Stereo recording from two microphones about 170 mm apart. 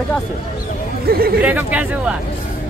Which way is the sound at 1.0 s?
65° right (ahead or behind).